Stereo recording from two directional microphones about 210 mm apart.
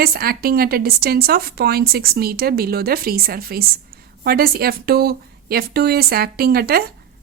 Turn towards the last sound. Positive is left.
turn(degrees=-45)  # may be behind; listen again after turning